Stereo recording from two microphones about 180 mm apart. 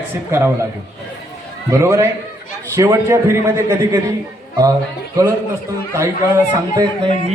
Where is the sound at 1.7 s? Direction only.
15° right (ahead or behind).